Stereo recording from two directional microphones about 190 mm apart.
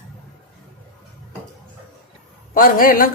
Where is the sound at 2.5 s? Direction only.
45° left (ahead or behind).